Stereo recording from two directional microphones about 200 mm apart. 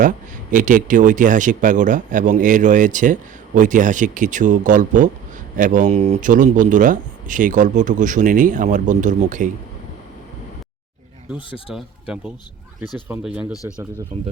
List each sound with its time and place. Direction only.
0.5 s speech: 40° right (ahead or behind)
11.7 s speech: 5° right (ahead or behind)
13.5 s speech: 15° left (ahead or behind)
14.1 s speech: 30° right (ahead or behind)